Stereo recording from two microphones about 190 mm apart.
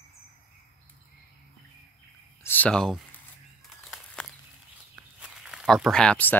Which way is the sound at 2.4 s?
10° left (ahead or behind).